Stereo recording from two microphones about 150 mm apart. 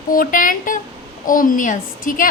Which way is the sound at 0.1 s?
65° left (ahead or behind).